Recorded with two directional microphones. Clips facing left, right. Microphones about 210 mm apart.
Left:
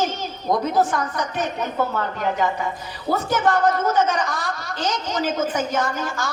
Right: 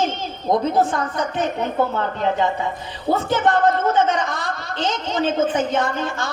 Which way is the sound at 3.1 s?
25° right (ahead or behind).